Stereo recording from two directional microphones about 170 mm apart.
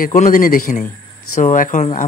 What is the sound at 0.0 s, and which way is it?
A man's voice, 50° left (ahead or behind).